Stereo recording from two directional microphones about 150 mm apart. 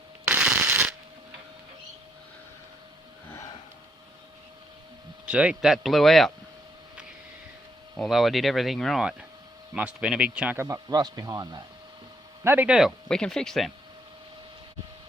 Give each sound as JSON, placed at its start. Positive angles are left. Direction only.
{"t": 0.3, "sound": "shuffling cards", "side_deg": -10}
{"t": 5.2, "sound": "speech", "side_deg": -5}
{"t": 7.9, "sound": "speech", "side_deg": 0}
{"t": 12.5, "sound": "speech", "side_deg": -10}